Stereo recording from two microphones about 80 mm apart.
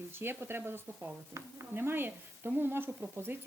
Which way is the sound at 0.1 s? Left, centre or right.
Right.